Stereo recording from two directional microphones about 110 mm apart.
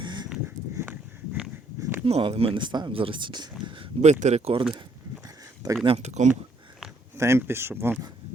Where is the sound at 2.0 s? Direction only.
55° right (ahead or behind).